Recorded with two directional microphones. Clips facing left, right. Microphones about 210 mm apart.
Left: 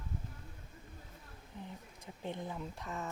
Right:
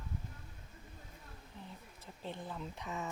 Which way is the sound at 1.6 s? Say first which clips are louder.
Left 4 dB; 15° left (ahead or behind).